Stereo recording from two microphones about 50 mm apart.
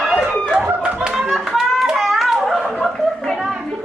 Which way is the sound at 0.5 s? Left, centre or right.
Right.